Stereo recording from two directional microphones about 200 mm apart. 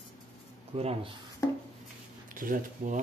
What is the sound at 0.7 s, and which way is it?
Speech, 30° right (ahead or behind).